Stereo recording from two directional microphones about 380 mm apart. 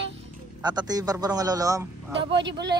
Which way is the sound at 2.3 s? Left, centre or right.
Right.